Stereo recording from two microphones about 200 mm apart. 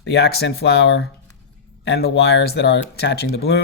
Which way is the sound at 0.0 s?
60° left (ahead or behind).